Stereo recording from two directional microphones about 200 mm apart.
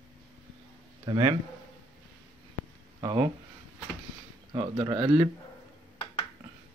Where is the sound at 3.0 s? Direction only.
20° right (ahead or behind).